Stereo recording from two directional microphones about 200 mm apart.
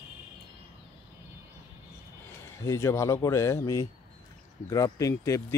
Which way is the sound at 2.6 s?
15° left (ahead or behind).